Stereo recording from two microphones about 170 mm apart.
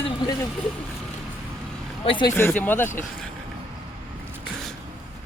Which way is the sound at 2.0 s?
30° left (ahead or behind).